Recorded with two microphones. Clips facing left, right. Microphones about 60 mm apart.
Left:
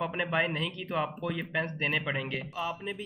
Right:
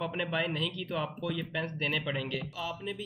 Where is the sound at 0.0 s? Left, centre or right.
Left.